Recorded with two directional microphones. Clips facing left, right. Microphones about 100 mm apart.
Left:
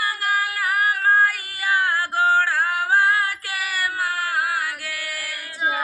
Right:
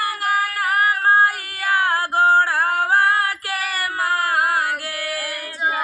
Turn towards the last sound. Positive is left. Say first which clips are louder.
# right 5 dB
turn(degrees=-50)  # may be behind; listen again after turning